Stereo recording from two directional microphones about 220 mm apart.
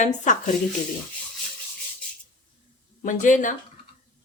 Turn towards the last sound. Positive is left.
turn(degrees=35)  # may be behind; listen again after turning